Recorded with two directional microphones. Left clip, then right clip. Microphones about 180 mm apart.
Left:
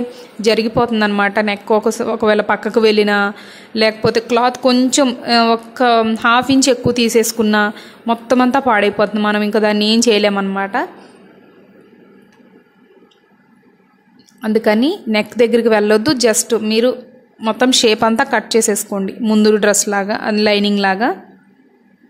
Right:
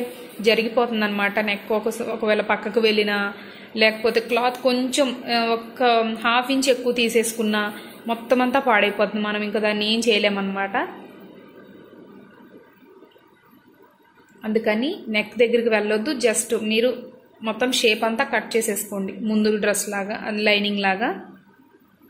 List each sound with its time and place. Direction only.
0.4 s a woman's voice: 45° left (ahead or behind)
14.4 s a woman's voice: 50° left (ahead or behind)